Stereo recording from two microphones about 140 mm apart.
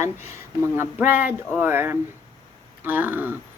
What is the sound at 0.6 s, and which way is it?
A woman's voice, 15° right (ahead or behind).